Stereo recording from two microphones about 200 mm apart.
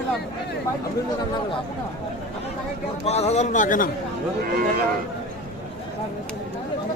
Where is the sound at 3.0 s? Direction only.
30° left (ahead or behind).